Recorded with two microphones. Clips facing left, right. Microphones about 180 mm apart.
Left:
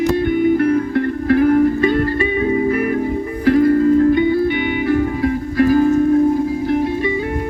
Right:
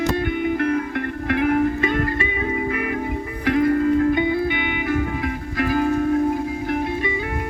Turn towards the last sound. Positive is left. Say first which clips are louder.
# left 7 dB
turn(degrees=40)  # may be behind; listen again after turning